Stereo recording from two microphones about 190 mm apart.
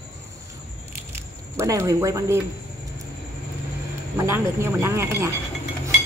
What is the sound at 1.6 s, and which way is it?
Speech, 15° right (ahead or behind).